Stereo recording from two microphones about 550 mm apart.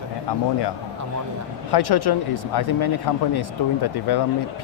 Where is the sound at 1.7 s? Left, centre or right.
Left.